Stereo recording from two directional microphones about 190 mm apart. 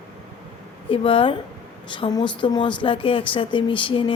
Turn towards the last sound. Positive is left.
turn(degrees=25)  # may be behind; listen again after turning